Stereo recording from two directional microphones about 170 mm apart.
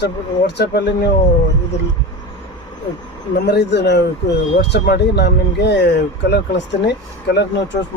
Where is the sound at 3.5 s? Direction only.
85° left.